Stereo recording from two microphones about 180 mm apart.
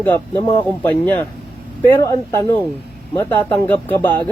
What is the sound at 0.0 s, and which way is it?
Speech, 10° left (ahead or behind).